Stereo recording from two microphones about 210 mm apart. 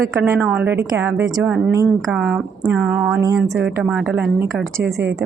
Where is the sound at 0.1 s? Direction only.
5° right (ahead or behind).